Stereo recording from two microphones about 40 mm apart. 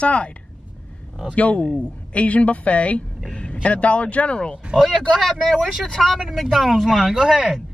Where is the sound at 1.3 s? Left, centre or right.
Left.